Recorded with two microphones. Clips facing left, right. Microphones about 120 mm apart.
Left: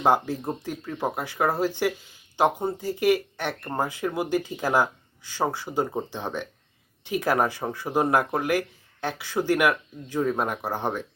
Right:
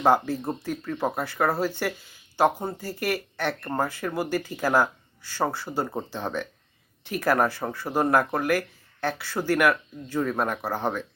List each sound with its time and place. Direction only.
0.0 s speech: 15° left (ahead or behind)